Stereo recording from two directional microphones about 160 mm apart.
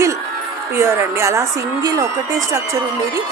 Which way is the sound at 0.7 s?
15° right (ahead or behind).